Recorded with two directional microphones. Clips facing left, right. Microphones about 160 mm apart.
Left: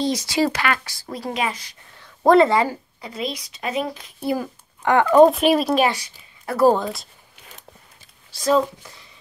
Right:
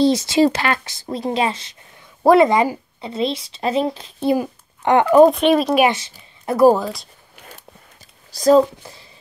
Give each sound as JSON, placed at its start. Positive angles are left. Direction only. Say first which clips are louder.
{"t": 0.0, "sound": "a woman's voice", "louder": "right 6 dB", "side_deg": -25}
{"t": 2.0, "sound": "a woman's voice", "louder": "right 2 dB", "side_deg": -15}
{"t": 4.4, "sound": "a sound", "louder": "right 5 dB", "side_deg": -20}
{"t": 5.1, "sound": "speech", "louder": "right 2 dB", "side_deg": 0}
{"t": 5.8, "sound": "speech", "louder": "right 4 dB", "side_deg": -25}
{"t": 8.3, "sound": "speech", "louder": "right 6 dB", "side_deg": -40}